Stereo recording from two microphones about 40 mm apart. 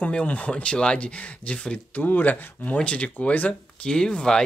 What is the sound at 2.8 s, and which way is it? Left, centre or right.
Speech, left.